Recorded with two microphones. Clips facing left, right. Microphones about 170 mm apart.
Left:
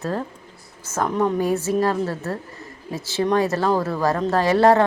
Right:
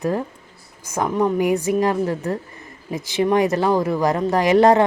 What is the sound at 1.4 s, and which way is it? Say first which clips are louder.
A man's voice: right 2 dB; 15° right (ahead or behind).